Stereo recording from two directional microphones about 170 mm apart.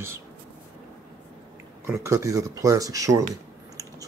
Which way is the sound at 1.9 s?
15° right (ahead or behind).